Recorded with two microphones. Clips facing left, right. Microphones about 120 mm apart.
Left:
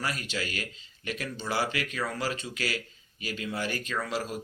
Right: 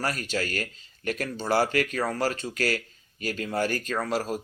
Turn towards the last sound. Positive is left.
turn(degrees=-40)  # may be behind; listen again after turning